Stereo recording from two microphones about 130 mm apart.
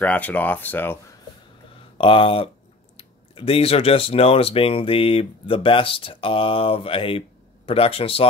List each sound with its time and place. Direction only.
0.0 s speech: 10° left (ahead or behind)
2.0 s speech: 45° left (ahead or behind)